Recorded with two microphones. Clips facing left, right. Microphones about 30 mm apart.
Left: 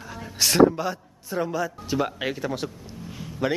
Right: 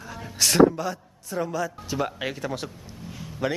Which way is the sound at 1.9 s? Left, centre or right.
Centre.